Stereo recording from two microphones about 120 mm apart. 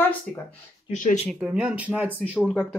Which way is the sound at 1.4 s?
10° right (ahead or behind).